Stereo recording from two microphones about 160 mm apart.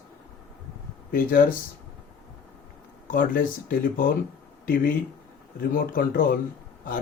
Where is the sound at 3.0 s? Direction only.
60° left (ahead or behind).